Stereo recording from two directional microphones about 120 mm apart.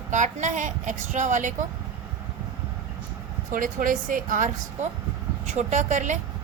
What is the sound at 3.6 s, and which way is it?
Speech, 90° right.